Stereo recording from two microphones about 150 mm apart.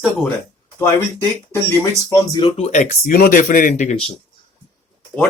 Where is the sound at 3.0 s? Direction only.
75° left (ahead or behind).